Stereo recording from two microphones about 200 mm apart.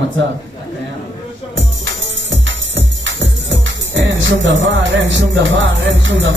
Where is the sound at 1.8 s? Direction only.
70° right (ahead or behind).